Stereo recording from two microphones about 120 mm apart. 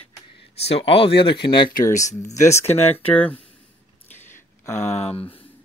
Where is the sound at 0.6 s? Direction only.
55° left (ahead or behind).